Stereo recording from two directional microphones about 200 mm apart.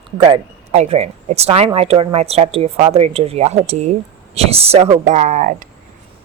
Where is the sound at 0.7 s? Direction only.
35° right (ahead or behind).